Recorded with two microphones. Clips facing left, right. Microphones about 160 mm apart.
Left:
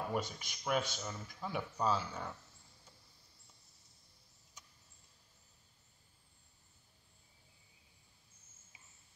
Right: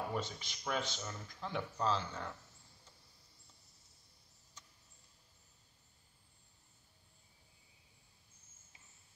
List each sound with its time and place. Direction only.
0.1 s speech: 10° left (ahead or behind)